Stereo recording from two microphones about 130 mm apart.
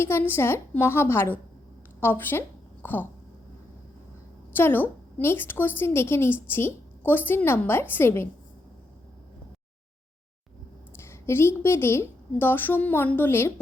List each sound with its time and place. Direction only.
0.0 s a woman's voice: 20° left (ahead or behind)
4.5 s a woman's voice: 15° left (ahead or behind)
10.9 s a woman's voice: 20° left (ahead or behind)